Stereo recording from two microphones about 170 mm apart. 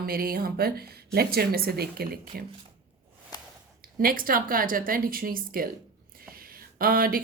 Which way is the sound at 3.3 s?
25° left (ahead or behind).